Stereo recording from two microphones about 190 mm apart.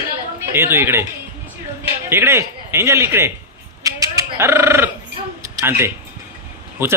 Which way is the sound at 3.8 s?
15° right (ahead or behind).